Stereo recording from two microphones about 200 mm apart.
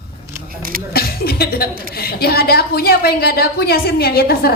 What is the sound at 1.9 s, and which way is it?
A woman's voice, 50° left (ahead or behind).